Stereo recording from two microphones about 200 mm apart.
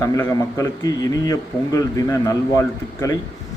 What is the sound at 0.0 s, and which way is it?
A man's voice, 15° left (ahead or behind).